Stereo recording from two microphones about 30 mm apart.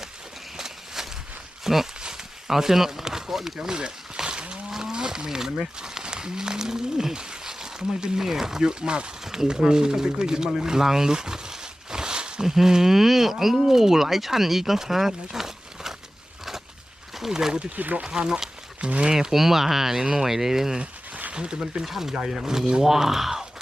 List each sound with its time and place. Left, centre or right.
0.5 s a sound: centre
1.6 s speech: centre
2.0 s a sound: right
2.5 s speech: centre
3.7 s a sound: right
4.7 s speech: right
9.5 s speech: right
12.5 s speech: centre
17.7 s speech: right
18.0 s speech: right
18.8 s speech: right
19.1 s speech: centre
21.3 s speech: right
21.8 s speech: centre